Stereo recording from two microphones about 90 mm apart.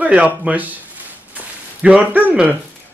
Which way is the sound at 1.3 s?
15° right (ahead or behind).